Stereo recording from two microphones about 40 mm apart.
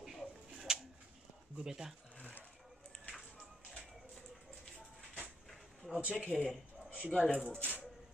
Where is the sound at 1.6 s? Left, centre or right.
Centre.